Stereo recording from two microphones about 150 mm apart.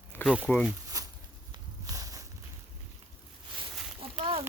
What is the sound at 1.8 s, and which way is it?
Walk, 25° right (ahead or behind).